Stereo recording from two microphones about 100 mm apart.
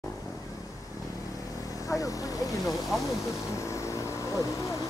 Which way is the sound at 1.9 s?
35° left (ahead or behind).